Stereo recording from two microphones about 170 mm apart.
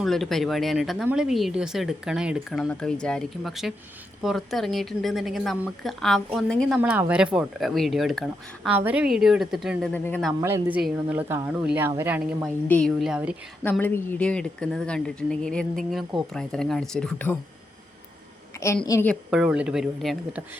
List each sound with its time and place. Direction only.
0.0 s speech: centre (ahead or behind)
9.9 s speech: 10° left (ahead or behind)
10.4 s speech: 15° right (ahead or behind)
12.6 s speech: 5° left (ahead or behind)
13.7 s speech: 10° left (ahead or behind)
18.5 s a sound: 15° left (ahead or behind)
18.9 s speech: 15° left (ahead or behind)
19.3 s speech: 5° right (ahead or behind)